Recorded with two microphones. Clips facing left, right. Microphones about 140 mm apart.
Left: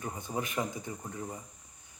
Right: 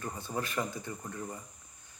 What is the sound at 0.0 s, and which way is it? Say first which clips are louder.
Speech: left 1 dB; 15° left (ahead or behind).